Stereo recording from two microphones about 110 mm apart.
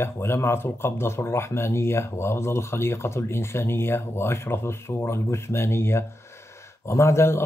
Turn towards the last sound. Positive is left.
turn(degrees=25)  # may be behind; listen again after turning